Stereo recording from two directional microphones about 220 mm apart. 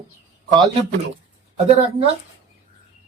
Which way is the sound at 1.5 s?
25° right (ahead or behind).